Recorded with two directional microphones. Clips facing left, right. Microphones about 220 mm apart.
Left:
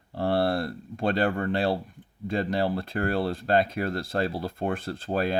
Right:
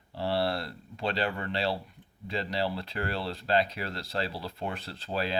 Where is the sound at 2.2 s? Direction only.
50° left (ahead or behind).